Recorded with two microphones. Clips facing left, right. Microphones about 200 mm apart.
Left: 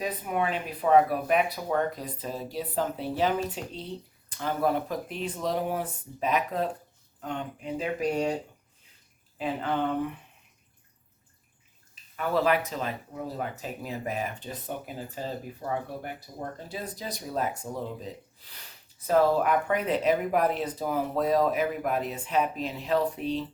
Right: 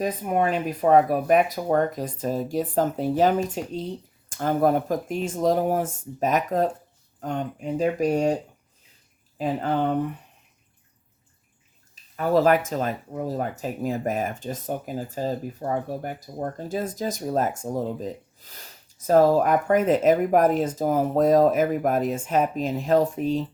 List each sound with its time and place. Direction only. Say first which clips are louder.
0.0 s speech: right 6 dB; 45° right (ahead or behind)
9.4 s speech: right 4 dB; 40° right (ahead or behind)
12.1 s speech: right 6 dB; 40° right (ahead or behind)